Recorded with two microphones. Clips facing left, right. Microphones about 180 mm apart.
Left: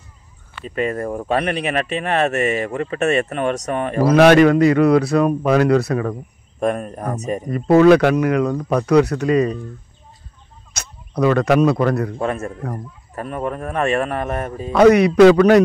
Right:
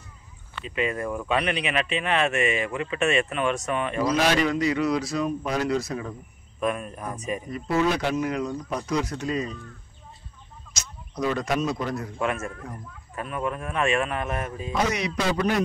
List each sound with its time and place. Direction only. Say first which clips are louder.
0.7 s speech: left 5 dB; 45° left (ahead or behind); by 6.1 s 65° left (ahead or behind)
6.6 s speech: left 7 dB; 45° left (ahead or behind); by 9.6 s 65° left (ahead or behind)
10.7 s speech: left 8 dB; 60° left (ahead or behind)
12.2 s speech: left 5 dB; 35° left (ahead or behind)
14.7 s speech: left 16 dB; 60° left (ahead or behind); by 15.6 s 80° left